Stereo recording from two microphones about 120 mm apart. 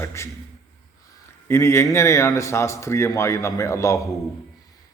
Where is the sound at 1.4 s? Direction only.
20° left (ahead or behind).